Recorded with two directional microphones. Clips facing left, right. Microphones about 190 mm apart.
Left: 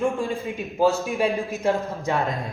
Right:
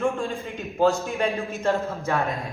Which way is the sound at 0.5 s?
Centre (ahead or behind).